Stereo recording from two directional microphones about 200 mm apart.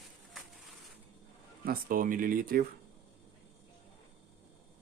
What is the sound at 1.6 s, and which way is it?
Speech, 45° right (ahead or behind).